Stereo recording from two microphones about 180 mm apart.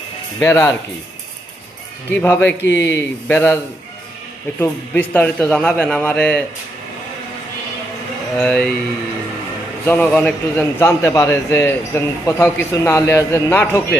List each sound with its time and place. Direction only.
0.3 s a man's voice: 15° left (ahead or behind)
2.0 s a man's voice: 10° left (ahead or behind)
4.6 s a man's voice: 10° left (ahead or behind)
8.4 s a man's voice: 5° left (ahead or behind)
9.8 s a man's voice: 10° left (ahead or behind)